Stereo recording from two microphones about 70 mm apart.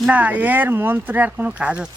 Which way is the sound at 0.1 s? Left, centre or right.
Right.